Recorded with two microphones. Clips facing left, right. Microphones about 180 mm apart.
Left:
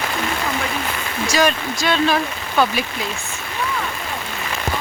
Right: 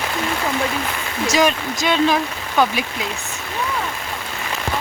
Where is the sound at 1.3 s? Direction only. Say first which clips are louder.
Right 1 dB; 20° right (ahead or behind).